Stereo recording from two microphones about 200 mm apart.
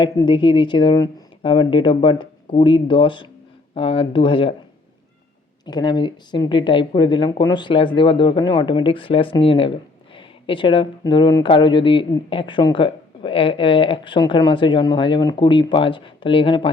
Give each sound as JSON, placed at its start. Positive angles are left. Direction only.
{"t": 0.0, "sound": "speech", "side_deg": 25}
{"t": 5.6, "sound": "speech", "side_deg": 20}